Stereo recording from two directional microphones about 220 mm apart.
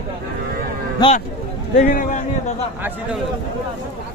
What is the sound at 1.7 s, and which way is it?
Speech, 40° left (ahead or behind).